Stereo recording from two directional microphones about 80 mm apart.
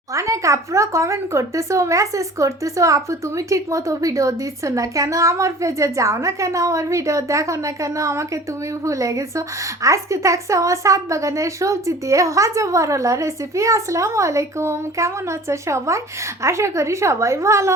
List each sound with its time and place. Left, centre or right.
0.1 s a woman's voice: right